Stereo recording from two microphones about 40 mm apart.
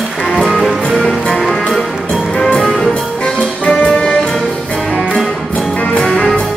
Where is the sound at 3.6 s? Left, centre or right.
Left.